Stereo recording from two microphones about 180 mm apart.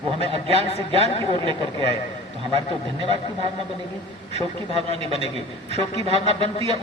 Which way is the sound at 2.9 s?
30° right (ahead or behind).